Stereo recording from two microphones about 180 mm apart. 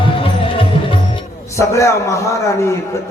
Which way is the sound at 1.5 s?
15° left (ahead or behind).